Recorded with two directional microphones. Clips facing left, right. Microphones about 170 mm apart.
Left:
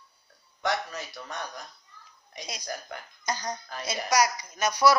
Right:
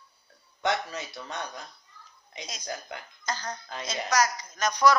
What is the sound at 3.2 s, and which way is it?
A woman's voice, 15° left (ahead or behind).